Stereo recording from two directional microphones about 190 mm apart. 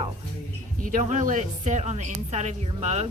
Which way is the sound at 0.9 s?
45° right (ahead or behind).